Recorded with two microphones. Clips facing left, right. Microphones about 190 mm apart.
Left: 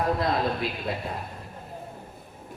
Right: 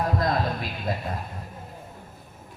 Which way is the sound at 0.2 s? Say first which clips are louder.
Even; 40° right (ahead or behind).